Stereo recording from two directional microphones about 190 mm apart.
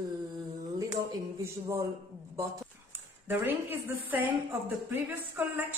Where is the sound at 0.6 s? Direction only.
20° right (ahead or behind).